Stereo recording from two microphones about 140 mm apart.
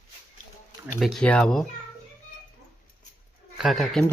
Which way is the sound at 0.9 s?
Centre (ahead or behind).